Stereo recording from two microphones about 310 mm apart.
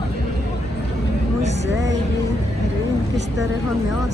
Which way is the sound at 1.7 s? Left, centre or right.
Right.